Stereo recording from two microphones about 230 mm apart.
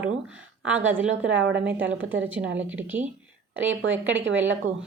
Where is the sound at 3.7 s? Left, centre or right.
Right.